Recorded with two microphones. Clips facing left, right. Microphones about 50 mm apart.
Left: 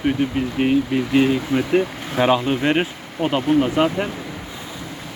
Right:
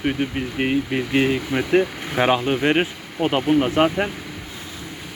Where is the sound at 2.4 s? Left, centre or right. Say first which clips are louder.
Even; centre.